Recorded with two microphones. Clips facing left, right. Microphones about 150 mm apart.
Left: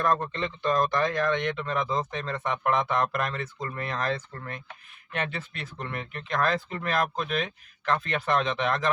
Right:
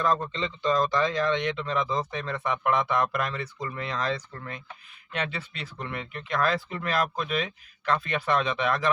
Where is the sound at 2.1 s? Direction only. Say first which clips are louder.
Right 1 dB; 40° left (ahead or behind).